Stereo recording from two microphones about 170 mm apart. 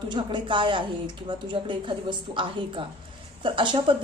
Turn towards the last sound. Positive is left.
turn(degrees=-30)  # may be behind; listen again after turning